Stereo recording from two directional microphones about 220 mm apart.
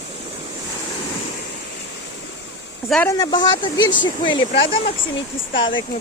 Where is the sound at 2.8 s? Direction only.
5° left (ahead or behind).